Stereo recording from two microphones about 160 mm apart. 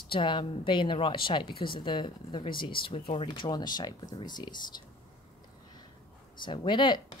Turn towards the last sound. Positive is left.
turn(degrees=30)  # may be behind; listen again after turning